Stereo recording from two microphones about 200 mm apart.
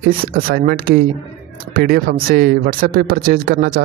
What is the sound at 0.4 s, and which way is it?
Speech, 50° right (ahead or behind).